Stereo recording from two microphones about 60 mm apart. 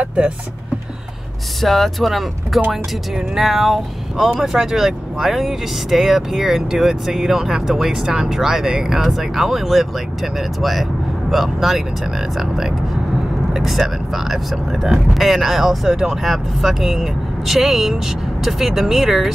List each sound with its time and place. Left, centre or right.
0.0 s speech: centre
1.6 s speech: centre